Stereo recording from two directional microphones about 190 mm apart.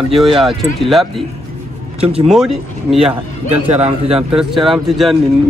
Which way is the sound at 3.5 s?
35° right (ahead or behind).